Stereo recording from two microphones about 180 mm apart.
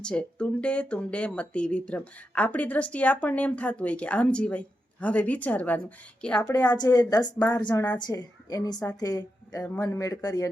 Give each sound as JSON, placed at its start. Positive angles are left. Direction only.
{"t": 0.0, "sound": "a woman's voice", "side_deg": 5}
{"t": 6.5, "sound": "a woman's voice", "side_deg": 20}